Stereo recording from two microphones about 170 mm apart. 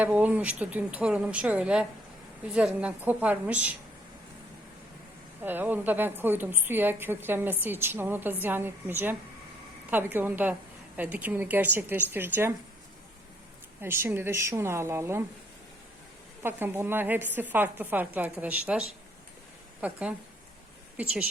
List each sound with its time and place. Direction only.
0.0 s a woman's voice: 10° right (ahead or behind)
5.4 s a woman's voice: 10° right (ahead or behind)
13.8 s a woman's voice: 15° right (ahead or behind)
16.4 s a woman's voice: 15° right (ahead or behind)